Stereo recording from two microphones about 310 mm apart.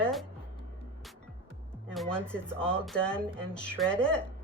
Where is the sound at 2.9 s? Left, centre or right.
Centre.